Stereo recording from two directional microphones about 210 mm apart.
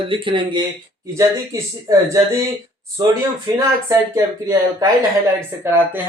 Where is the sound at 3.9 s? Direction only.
15° right (ahead or behind).